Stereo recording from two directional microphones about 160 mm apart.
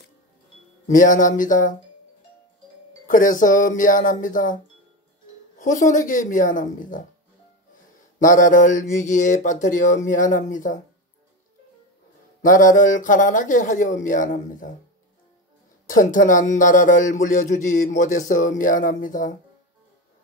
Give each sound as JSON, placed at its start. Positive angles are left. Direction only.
{"t": 0.8, "sound": "speech", "side_deg": 55}
{"t": 3.1, "sound": "speech", "side_deg": 55}
{"t": 5.6, "sound": "speech", "side_deg": 55}
{"t": 8.2, "sound": "speech", "side_deg": 55}
{"t": 12.4, "sound": "speech", "side_deg": 55}
{"t": 15.9, "sound": "speech", "side_deg": 55}